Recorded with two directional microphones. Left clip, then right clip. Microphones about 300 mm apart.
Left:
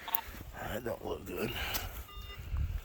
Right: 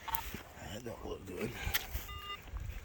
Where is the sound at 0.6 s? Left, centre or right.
Centre.